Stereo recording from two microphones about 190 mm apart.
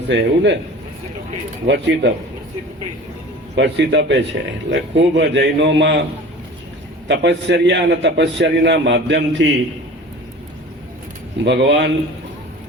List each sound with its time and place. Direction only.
0.1 s a man's voice: 70° right (ahead or behind)
1.6 s a man's voice: 65° right (ahead or behind)
3.5 s a man's voice: 65° right (ahead or behind)
7.1 s a man's voice: 65° right (ahead or behind)
11.4 s a man's voice: 65° right (ahead or behind)